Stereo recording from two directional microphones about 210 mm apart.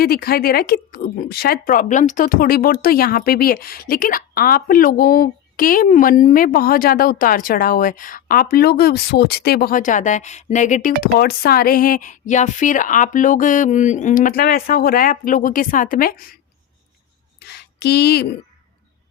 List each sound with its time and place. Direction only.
0.0 s speech: 45° left (ahead or behind)
11.0 s speech: 50° left (ahead or behind)
17.4 s a sound: 50° left (ahead or behind)